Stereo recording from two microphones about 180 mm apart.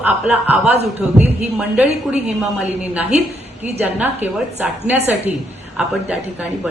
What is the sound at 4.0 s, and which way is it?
A woman's voice, 10° right (ahead or behind).